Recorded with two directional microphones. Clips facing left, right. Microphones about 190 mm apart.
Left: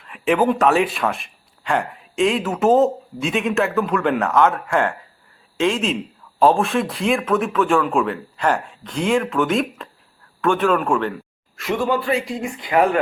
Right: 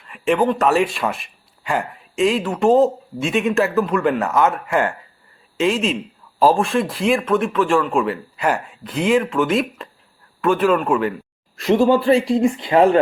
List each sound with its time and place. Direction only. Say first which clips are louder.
0.0 s speech: even; centre (ahead or behind)
11.6 s speech: right 6 dB; 30° right (ahead or behind)